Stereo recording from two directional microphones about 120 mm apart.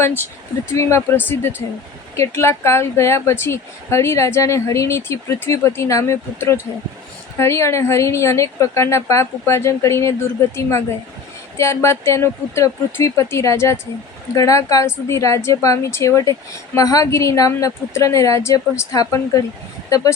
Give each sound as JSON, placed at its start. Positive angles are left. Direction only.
{"t": 0.0, "sound": "speech", "side_deg": 20}